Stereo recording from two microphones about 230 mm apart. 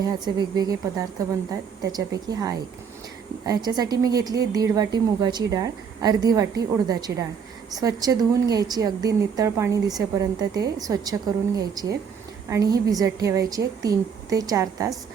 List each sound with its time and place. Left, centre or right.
0.3 s speech: centre